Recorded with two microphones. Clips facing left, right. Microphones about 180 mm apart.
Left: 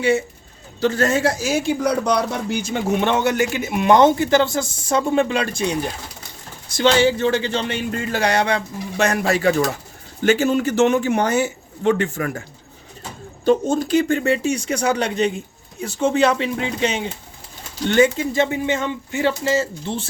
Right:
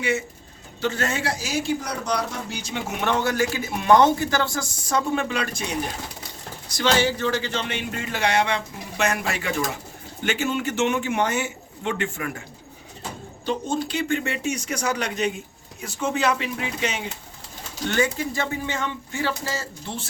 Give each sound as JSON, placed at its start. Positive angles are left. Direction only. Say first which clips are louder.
{"t": 0.8, "sound": "speech", "louder": "left 8 dB", "side_deg": 40}
{"t": 2.9, "sound": "speech", "louder": "left 5 dB", "side_deg": 25}
{"t": 13.4, "sound": "speech", "louder": "left 8 dB", "side_deg": 45}